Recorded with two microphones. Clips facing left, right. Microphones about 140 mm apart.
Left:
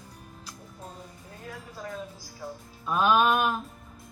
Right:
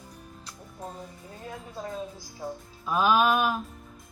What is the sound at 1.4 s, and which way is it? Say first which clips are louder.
Music: right 2 dB; 25° right (ahead or behind).